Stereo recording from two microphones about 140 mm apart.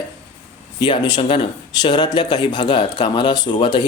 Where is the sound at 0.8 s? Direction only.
30° left (ahead or behind).